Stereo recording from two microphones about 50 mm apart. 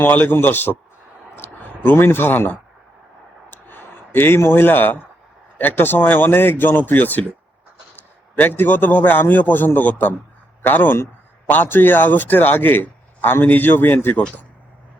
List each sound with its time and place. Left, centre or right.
0.0 s speech: left
1.8 s speech: left
3.5 s a sound: left
5.5 s speech: left
8.4 s a man's voice: left